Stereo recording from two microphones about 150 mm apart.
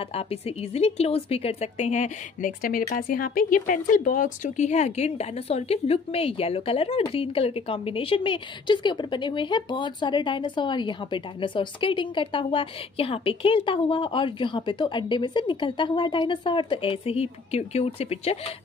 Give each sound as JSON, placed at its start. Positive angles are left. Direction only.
{"t": 0.1, "sound": "a woman's voice", "side_deg": 40}